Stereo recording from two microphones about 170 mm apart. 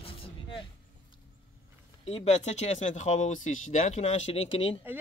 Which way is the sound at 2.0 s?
35° left (ahead or behind).